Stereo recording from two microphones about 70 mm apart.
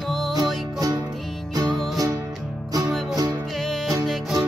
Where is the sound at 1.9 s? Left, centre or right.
Right.